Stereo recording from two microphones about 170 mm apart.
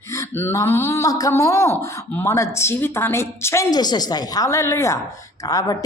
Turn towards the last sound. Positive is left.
turn(degrees=20)  # may be behind; listen again after turning